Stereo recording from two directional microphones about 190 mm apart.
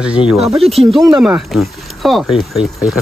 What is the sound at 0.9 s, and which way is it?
Speech, 15° right (ahead or behind).